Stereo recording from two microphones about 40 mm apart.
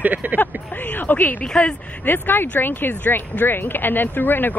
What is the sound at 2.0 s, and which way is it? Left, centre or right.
Speech, left.